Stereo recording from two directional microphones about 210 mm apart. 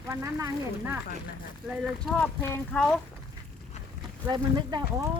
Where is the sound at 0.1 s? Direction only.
15° right (ahead or behind).